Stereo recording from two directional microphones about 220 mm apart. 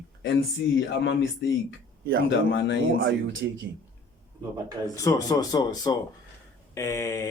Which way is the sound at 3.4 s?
50° right (ahead or behind).